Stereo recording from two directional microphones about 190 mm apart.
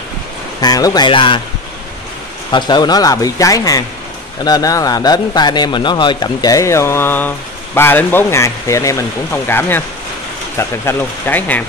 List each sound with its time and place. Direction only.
0.6 s speech: 20° left (ahead or behind)
2.5 s a man's voice: 20° left (ahead or behind)